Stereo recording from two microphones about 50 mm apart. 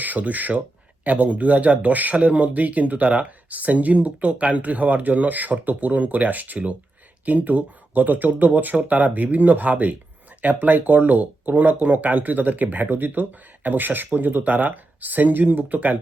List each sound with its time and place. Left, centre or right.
0.0 s speech: right